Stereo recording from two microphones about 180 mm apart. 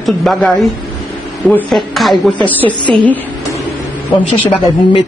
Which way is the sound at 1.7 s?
Centre (ahead or behind).